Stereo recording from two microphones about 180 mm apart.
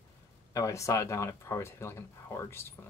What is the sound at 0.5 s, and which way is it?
Speech, 20° left (ahead or behind).